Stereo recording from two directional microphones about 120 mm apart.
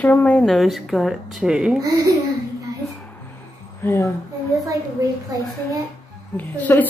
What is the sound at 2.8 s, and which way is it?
Music, 10° right (ahead or behind).